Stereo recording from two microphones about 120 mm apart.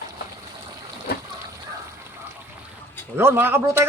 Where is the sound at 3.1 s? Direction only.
20° right (ahead or behind).